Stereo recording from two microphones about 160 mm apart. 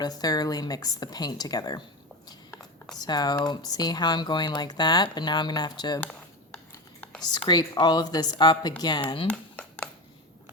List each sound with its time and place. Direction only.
0.0 s speech: 25° left (ahead or behind)
2.6 s a sound: 5° left (ahead or behind)
3.0 s speech: 25° left (ahead or behind)
6.0 s dishes: 10° left (ahead or behind)
7.3 s speech: 25° left (ahead or behind)
9.3 s a sound: 5° left (ahead or behind)